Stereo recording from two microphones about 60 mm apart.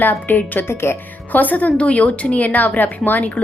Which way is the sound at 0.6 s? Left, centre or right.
Left.